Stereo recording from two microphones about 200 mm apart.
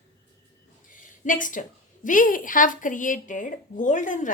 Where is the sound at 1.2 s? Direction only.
40° left (ahead or behind).